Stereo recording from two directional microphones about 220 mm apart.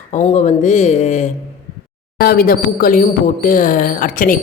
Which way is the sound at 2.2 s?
45° left (ahead or behind).